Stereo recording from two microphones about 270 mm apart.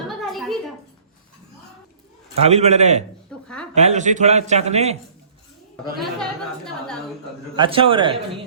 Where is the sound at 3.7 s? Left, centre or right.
Right.